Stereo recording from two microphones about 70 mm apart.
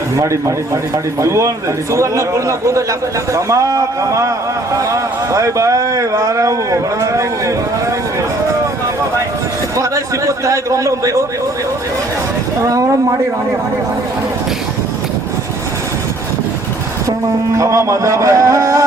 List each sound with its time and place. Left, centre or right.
0.2 s speech: right
9.7 s speech: right
12.6 s speech: right
17.6 s speech: right